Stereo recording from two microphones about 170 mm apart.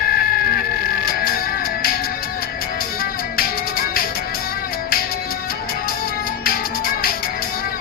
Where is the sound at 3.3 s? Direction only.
60° left (ahead or behind).